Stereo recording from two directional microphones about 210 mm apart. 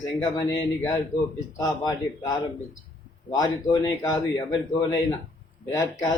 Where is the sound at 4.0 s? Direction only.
15° left (ahead or behind).